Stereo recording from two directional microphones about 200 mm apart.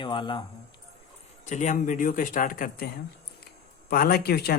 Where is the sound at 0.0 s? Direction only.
25° left (ahead or behind).